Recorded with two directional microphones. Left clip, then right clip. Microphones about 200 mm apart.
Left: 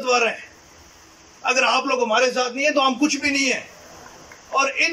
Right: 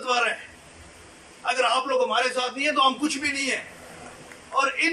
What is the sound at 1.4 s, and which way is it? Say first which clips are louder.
A man's voice: left 4 dB; 50° left (ahead or behind).